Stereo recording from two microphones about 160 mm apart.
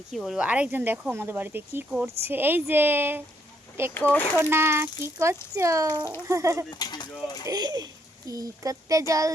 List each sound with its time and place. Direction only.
0.1 s speech: centre (ahead or behind)
3.9 s speech: 10° left (ahead or behind)
4.4 s speech: 15° right (ahead or behind)
6.7 s speech: 25° left (ahead or behind)
7.4 s speech: 25° right (ahead or behind)